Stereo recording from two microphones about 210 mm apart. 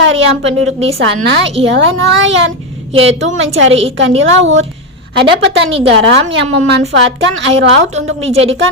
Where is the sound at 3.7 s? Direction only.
30° right (ahead or behind).